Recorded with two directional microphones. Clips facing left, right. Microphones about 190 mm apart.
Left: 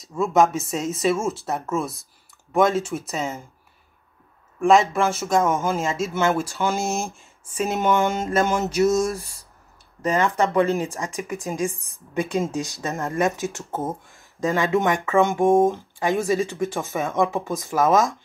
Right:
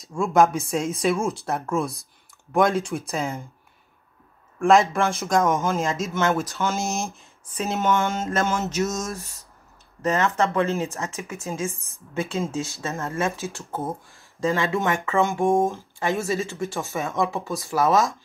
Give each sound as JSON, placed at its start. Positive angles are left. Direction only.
{"t": 0.0, "sound": "speech", "side_deg": 0}
{"t": 4.6, "sound": "speech", "side_deg": 0}